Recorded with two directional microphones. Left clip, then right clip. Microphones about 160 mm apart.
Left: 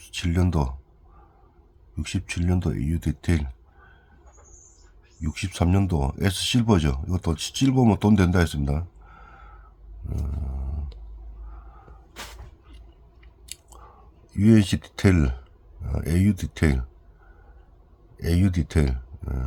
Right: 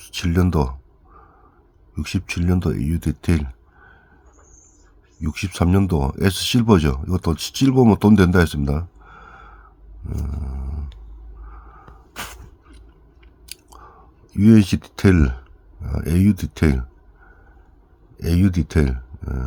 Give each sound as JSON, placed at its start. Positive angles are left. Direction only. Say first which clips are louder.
{"t": 0.0, "sound": "speech", "louder": "right 5 dB", "side_deg": -30}
{"t": 2.0, "sound": "speech", "louder": "right 5 dB", "side_deg": -30}
{"t": 5.2, "sound": "speech", "louder": "right 4 dB", "side_deg": -25}
{"t": 10.2, "sound": "a sound", "louder": "right 4 dB", "side_deg": -15}
{"t": 12.1, "sound": "a sound", "louder": "right 7 dB", "side_deg": -90}
{"t": 13.5, "sound": "chewing", "louder": "right 4 dB", "side_deg": -15}
{"t": 14.3, "sound": "speech", "louder": "right 5 dB", "side_deg": -15}
{"t": 18.2, "sound": "speech", "louder": "right 4 dB", "side_deg": -15}